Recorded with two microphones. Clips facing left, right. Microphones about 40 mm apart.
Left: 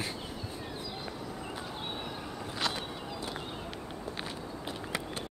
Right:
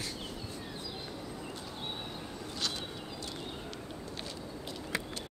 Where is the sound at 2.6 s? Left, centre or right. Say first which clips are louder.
Left 4 dB; left.